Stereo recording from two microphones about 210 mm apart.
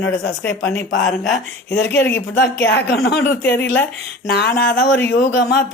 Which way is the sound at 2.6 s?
55° left (ahead or behind).